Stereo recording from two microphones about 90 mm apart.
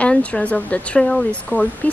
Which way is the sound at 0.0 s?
15° left (ahead or behind).